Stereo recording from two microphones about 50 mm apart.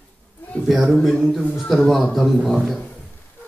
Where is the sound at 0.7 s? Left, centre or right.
Centre.